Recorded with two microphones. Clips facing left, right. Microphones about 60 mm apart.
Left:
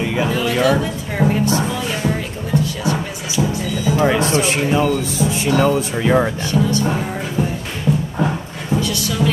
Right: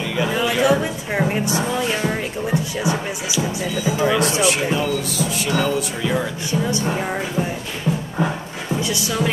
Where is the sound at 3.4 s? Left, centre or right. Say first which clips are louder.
Left 5 dB; centre.